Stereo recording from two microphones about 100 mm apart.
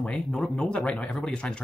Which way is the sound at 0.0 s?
10° left (ahead or behind).